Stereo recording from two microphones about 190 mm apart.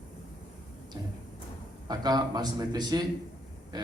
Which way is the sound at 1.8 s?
20° right (ahead or behind).